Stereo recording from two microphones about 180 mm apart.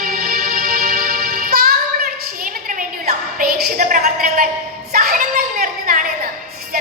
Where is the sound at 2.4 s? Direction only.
50° right (ahead or behind).